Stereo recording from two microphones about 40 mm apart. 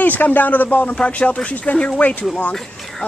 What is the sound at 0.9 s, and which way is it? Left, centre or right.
Speech, left.